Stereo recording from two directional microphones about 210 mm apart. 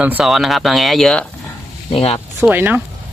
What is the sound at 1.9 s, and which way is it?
Speech, 30° left (ahead or behind).